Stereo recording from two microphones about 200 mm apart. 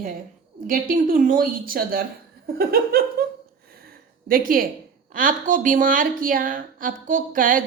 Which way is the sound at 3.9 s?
45° right (ahead or behind).